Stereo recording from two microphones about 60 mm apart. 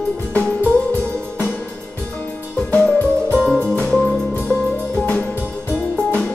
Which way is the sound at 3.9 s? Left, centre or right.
Centre.